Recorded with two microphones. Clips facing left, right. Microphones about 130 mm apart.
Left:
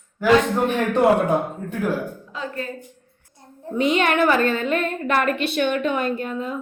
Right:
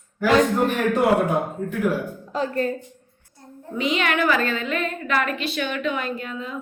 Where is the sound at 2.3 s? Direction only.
40° right (ahead or behind).